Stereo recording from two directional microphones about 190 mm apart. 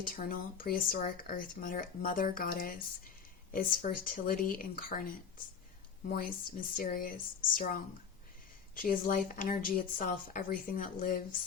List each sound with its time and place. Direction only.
0.1 s speech: 50° left (ahead or behind)